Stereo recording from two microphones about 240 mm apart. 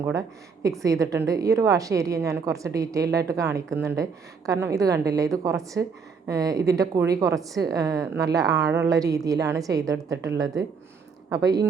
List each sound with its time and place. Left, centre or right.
0.0 s a woman's voice: centre